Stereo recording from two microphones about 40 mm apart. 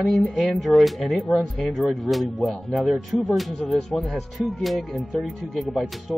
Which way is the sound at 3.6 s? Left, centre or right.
Centre.